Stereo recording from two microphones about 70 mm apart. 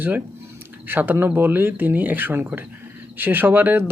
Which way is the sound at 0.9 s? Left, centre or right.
Right.